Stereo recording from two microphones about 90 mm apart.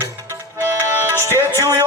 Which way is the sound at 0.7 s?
30° right (ahead or behind).